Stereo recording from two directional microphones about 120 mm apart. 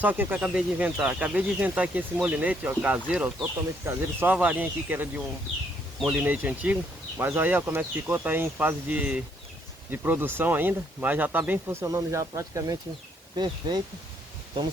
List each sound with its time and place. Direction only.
0.0 s speech: 15° right (ahead or behind)
13.3 s speech: 40° right (ahead or behind)